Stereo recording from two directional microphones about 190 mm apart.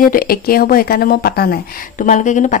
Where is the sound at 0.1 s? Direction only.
50° left (ahead or behind).